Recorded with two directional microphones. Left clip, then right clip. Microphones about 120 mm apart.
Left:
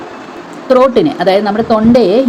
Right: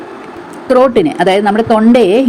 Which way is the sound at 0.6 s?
50° right (ahead or behind).